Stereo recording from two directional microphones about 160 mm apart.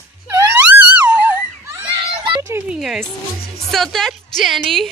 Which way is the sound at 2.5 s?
5° right (ahead or behind).